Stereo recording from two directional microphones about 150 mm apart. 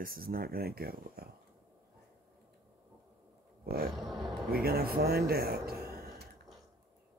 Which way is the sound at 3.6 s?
90° right.